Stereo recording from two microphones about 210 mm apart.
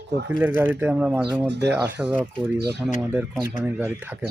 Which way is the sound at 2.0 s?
5° right (ahead or behind).